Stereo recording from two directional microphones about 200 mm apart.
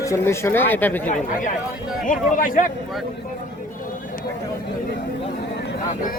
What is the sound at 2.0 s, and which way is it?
Speech, 45° left (ahead or behind).